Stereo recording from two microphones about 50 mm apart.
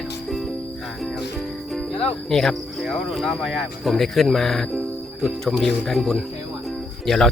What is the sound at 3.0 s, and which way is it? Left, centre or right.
Speech, centre.